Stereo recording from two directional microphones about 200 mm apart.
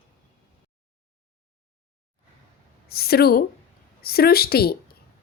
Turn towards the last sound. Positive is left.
turn(degrees=50)  # may be behind; listen again after turning